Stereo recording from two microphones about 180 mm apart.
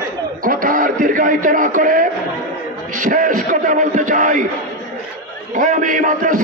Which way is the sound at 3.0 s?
50° right (ahead or behind).